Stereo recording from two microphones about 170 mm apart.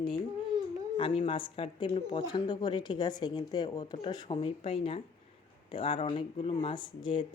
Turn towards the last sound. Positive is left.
turn(degrees=30)  # may be behind; listen again after turning